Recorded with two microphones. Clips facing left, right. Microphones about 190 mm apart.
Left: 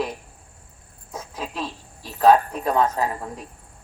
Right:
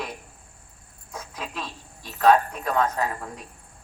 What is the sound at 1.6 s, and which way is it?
A woman's voice, 30° left (ahead or behind).